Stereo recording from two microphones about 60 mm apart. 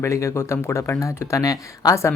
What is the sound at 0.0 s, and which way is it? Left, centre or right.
Speech, left.